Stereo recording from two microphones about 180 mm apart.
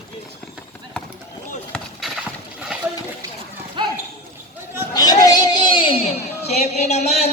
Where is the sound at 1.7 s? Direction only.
Centre (ahead or behind).